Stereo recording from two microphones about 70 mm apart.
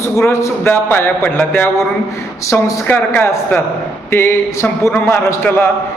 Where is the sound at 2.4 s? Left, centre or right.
Left.